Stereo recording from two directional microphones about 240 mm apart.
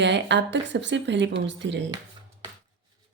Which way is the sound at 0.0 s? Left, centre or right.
Right.